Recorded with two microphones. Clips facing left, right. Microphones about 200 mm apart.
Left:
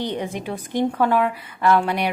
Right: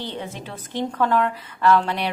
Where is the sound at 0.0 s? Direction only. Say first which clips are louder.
Left 6 dB; 15° left (ahead or behind).